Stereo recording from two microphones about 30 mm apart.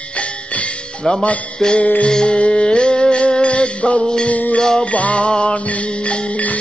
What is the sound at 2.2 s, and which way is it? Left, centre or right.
Music, left.